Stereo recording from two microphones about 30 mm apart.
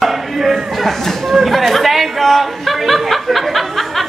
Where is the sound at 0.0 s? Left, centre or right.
Centre.